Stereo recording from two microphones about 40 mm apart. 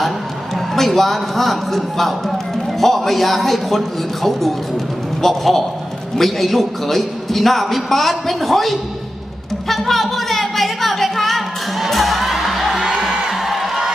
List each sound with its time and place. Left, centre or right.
0.7 s a man's voice: centre
9.6 s a sound: centre
12.8 s music: centre
13.3 s music: centre